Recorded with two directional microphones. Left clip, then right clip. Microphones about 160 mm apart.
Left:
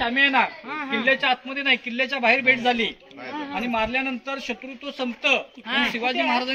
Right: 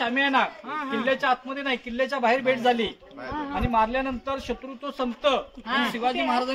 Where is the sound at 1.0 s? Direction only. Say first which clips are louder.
Left 3 dB; 10° right (ahead or behind); by 2.9 s 35° right (ahead or behind).